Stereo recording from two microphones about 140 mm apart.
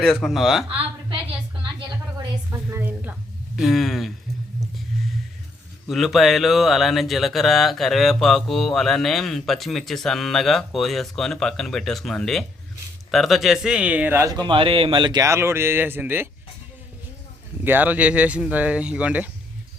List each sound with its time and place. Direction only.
0.0 s speech: 5° left (ahead or behind)
2.1 s a sound: 20° right (ahead or behind)
3.5 s speech: centre (ahead or behind)
5.9 s speech: centre (ahead or behind); by 14.3 s 15° right (ahead or behind)
14.3 s speech: 35° right (ahead or behind)
15.2 s speech: 20° right (ahead or behind)
17.6 s speech: 15° right (ahead or behind)